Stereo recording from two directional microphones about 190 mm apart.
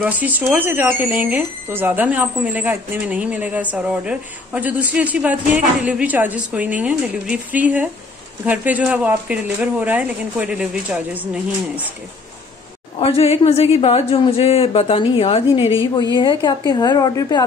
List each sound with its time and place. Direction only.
0.0 s speech: 10° right (ahead or behind)
13.0 s a woman's voice: 30° left (ahead or behind)